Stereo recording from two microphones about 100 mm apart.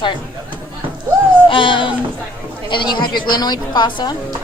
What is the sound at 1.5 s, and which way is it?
A woman's voice, 55° left (ahead or behind).